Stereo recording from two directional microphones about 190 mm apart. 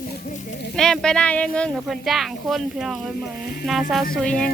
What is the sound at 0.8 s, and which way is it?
Speech, 5° left (ahead or behind).